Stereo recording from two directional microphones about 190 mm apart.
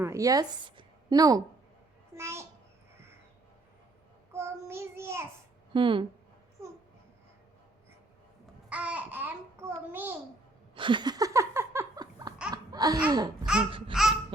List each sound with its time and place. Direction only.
0.0 s a woman's voice: 15° right (ahead or behind)
4.3 s child singing: 15° right (ahead or behind)
5.7 s speech: 25° right (ahead or behind)
8.7 s babbling: 5° right (ahead or behind)
9.9 s a child's voice: 10° right (ahead or behind)
10.8 s laughter: 25° right (ahead or behind)
13.1 s speech: 20° right (ahead or behind)
13.4 s babbling: 5° right (ahead or behind)
13.7 s speech: 25° right (ahead or behind)
13.9 s laughter: centre (ahead or behind)